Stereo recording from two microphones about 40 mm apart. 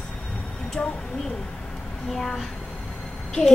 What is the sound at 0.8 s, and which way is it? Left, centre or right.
Speech, left.